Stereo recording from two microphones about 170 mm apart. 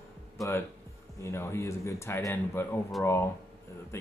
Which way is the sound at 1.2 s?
15° left (ahead or behind).